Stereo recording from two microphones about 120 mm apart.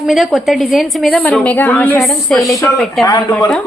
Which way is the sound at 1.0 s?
10° left (ahead or behind).